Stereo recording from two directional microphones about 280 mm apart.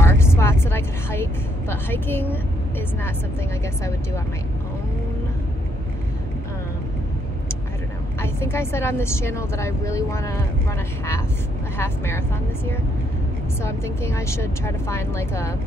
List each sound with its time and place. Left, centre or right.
0.0 s vehicle: centre
8.2 s a woman's voice: centre
13.6 s a woman's voice: centre